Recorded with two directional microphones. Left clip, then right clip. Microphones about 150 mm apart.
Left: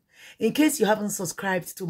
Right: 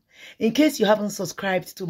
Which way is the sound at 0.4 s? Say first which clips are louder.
Right 2 dB; 20° right (ahead or behind).